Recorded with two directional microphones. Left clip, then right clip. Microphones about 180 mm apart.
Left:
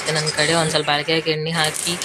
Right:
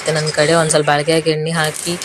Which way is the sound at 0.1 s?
Centre (ahead or behind).